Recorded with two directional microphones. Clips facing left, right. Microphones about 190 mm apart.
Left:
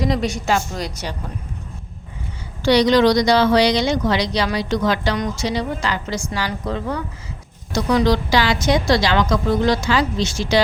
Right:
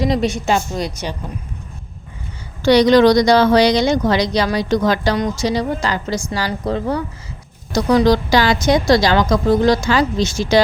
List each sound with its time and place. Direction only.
0.0 s a woman's voice: 25° right (ahead or behind)
2.6 s a woman's voice: 50° right (ahead or behind)